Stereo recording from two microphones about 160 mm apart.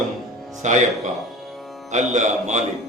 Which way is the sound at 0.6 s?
50° right (ahead or behind).